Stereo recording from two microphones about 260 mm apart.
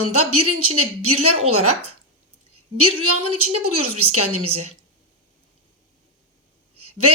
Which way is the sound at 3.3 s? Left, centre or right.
Right.